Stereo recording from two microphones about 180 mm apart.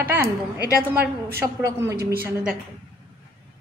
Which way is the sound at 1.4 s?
15° right (ahead or behind).